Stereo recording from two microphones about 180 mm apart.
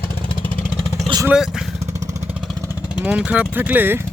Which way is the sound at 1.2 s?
5° right (ahead or behind).